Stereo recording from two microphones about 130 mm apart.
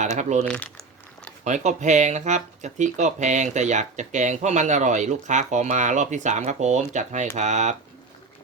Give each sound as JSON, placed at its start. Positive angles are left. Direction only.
{"t": 0.2, "sound": "speech", "side_deg": -65}
{"t": 0.4, "sound": "speech", "side_deg": 10}
{"t": 1.5, "sound": "speech", "side_deg": -70}